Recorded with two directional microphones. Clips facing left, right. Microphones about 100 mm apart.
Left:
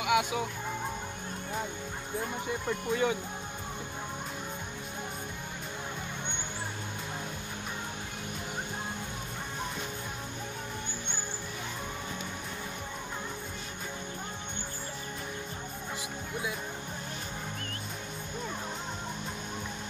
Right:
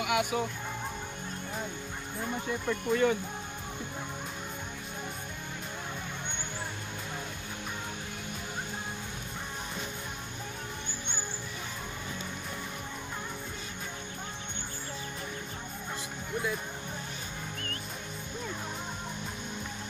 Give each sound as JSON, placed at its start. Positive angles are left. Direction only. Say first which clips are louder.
{"t": 0.0, "sound": "speech", "louder": "left 1 dB", "side_deg": 20}
{"t": 2.6, "sound": "speech", "louder": "right 3 dB", "side_deg": 10}